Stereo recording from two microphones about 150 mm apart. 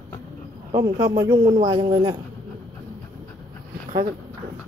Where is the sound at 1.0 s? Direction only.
25° right (ahead or behind).